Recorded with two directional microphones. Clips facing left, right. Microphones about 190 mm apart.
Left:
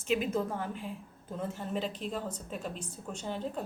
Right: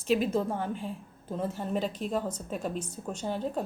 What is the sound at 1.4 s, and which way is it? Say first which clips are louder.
Speech: right 4 dB; 40° right (ahead or behind).